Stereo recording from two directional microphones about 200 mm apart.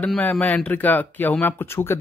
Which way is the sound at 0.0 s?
5° left (ahead or behind).